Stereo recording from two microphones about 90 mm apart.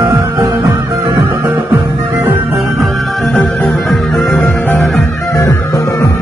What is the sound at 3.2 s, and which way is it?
Music, 20° left (ahead or behind).